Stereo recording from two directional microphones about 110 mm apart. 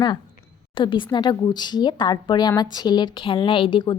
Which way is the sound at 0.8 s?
45° left (ahead or behind).